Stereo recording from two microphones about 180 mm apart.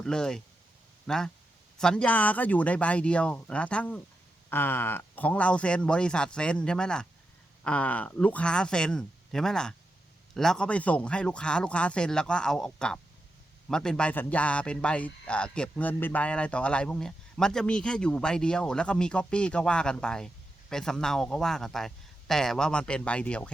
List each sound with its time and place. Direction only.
0.0 s speech: 5° left (ahead or behind)